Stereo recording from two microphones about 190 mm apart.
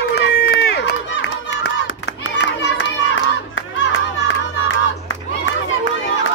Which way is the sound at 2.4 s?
70° left (ahead or behind).